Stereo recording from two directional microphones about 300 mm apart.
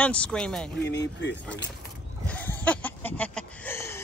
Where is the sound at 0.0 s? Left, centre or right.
Centre.